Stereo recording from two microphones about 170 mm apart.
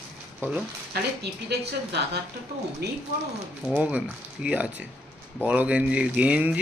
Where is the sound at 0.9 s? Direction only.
75° right (ahead or behind).